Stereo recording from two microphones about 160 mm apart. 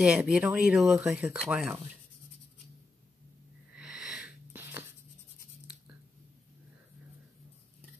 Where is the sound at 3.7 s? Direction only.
5° right (ahead or behind).